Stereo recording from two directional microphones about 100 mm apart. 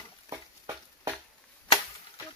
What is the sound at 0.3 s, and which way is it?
Stir, 30° right (ahead or behind).